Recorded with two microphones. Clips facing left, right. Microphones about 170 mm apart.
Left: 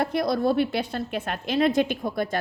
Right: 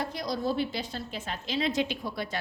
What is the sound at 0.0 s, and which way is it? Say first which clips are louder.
A woman's voice: left 8 dB; 60° left (ahead or behind).